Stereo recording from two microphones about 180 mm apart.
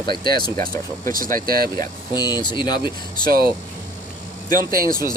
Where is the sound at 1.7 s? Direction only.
20° left (ahead or behind).